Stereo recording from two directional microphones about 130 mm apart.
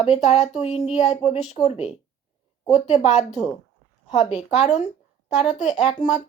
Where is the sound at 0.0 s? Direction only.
55° left (ahead or behind).